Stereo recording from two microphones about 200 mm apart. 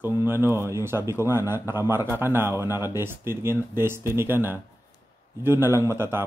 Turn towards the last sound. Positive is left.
turn(degrees=-10)  # may be behind; listen again after turning